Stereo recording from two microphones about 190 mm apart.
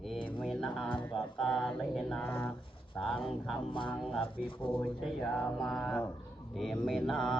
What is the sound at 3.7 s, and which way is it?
Speech, 25° left (ahead or behind).